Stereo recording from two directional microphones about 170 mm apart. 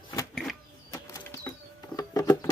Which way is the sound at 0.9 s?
20° left (ahead or behind).